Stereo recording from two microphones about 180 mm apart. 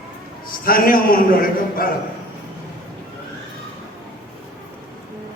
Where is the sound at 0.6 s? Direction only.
55° left (ahead or behind).